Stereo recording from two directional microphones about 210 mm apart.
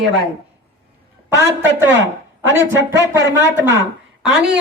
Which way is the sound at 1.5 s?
55° right (ahead or behind).